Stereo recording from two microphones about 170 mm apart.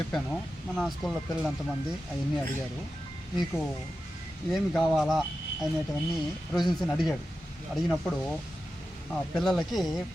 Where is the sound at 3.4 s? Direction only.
Centre (ahead or behind).